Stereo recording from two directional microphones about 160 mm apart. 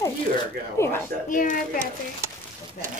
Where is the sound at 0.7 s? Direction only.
15° left (ahead or behind).